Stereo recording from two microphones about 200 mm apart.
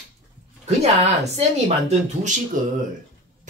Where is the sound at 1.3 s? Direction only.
35° right (ahead or behind).